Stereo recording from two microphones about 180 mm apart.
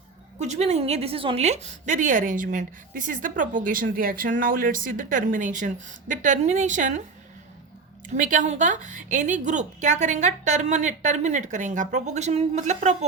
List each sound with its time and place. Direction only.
0.3 s a woman's voice: 40° right (ahead or behind)
8.1 s a woman's voice: 45° right (ahead or behind)